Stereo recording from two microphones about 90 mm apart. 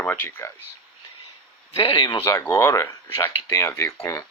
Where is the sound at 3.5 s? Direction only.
35° left (ahead or behind).